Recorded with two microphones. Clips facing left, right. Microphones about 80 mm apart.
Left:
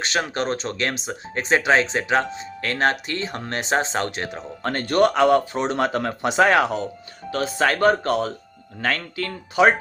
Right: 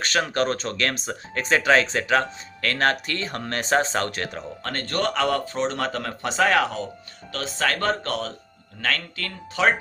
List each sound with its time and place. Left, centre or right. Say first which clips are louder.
0.0 s speech: right 1 dB; left
4.6 s speech: left 8 dB; centre